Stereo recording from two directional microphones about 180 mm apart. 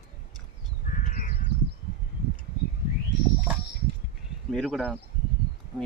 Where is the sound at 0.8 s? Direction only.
50° left (ahead or behind).